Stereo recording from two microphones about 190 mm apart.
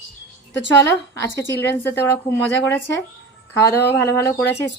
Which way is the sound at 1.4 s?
15° left (ahead or behind).